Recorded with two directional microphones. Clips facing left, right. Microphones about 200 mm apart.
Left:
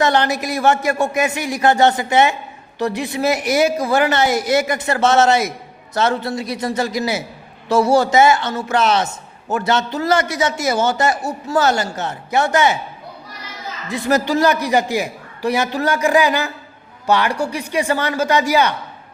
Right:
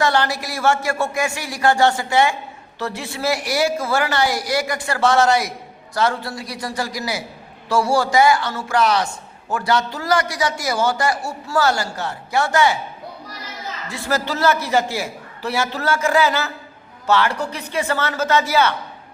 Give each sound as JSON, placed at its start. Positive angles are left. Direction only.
{"t": 0.0, "sound": "a man's voice", "side_deg": 20}
{"t": 13.8, "sound": "a man's voice", "side_deg": 20}